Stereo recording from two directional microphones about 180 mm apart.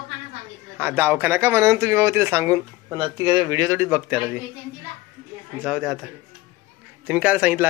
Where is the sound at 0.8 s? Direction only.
10° right (ahead or behind).